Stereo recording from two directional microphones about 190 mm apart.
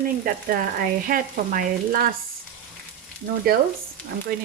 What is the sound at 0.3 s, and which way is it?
Speech, 50° right (ahead or behind).